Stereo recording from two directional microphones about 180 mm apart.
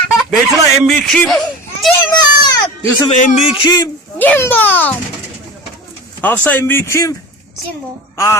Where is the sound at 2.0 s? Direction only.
20° left (ahead or behind).